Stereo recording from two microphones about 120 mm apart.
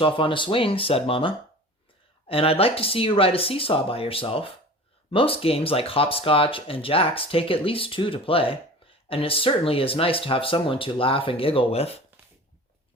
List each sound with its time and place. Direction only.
0.0 s speech: 45° left (ahead or behind)
2.3 s speech: 55° left (ahead or behind)